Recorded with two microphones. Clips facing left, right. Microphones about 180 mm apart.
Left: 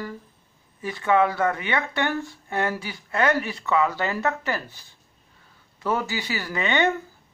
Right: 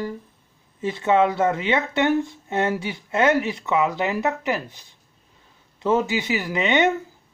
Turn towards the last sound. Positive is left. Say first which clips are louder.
# right 3 dB
turn(degrees=-20)  # may be behind; listen again after turning